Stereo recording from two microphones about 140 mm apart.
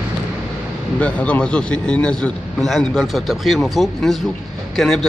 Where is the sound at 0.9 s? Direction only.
10° left (ahead or behind).